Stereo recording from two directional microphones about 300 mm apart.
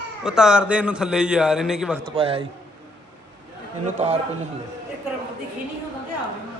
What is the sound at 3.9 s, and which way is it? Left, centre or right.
Speech, right.